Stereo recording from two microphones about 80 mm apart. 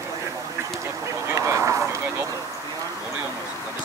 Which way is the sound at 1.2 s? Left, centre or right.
Right.